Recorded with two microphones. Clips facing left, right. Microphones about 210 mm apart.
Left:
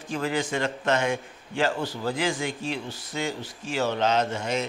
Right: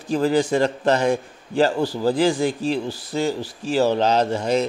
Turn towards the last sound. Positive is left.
turn(degrees=-35)  # may be behind; listen again after turning